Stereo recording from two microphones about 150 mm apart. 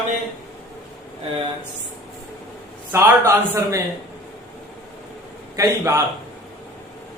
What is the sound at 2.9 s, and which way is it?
Speech, 15° right (ahead or behind).